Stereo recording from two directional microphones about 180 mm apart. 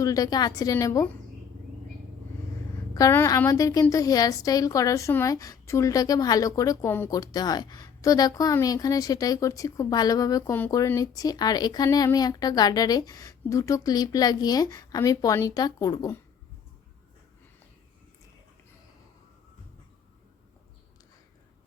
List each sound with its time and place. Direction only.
0.0 s a woman's voice: 20° left (ahead or behind)
2.9 s a woman's voice: 15° left (ahead or behind)